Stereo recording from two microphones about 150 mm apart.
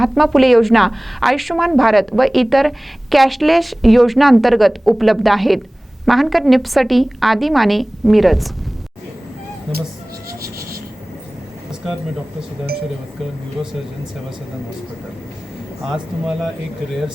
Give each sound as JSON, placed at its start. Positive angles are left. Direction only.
{"t": 0.0, "sound": "a woman's voice", "side_deg": 0}
{"t": 10.4, "sound": "a sound", "side_deg": -80}
{"t": 15.9, "sound": "a woman's voice", "side_deg": 0}